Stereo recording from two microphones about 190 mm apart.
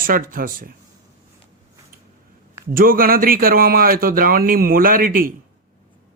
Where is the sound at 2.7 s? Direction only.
50° right (ahead or behind).